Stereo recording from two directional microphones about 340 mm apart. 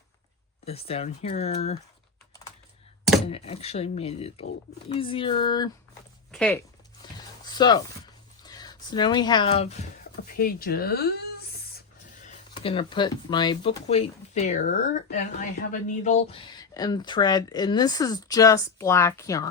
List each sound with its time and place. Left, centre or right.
0.6 s speech: centre
3.2 s speech: centre
7.0 s a sound: centre
8.4 s speech: centre